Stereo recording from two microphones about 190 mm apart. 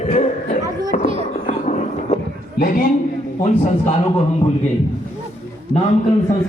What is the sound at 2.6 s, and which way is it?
Speech, 45° left (ahead or behind).